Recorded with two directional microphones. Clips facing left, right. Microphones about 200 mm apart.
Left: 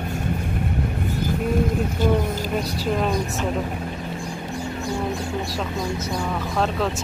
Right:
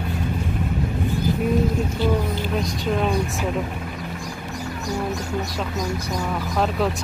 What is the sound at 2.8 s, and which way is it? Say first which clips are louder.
Speech: right 1 dB; centre (ahead or behind).